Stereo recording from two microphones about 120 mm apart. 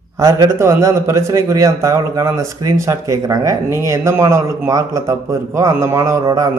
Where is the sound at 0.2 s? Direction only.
25° right (ahead or behind).